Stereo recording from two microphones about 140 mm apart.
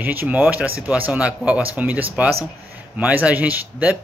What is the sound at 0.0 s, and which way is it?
Speech, 15° right (ahead or behind).